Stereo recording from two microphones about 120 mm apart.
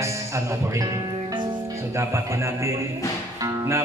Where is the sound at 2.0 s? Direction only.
25° right (ahead or behind).